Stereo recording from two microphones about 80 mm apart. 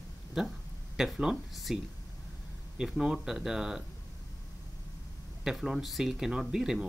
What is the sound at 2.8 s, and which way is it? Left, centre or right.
Speech, centre.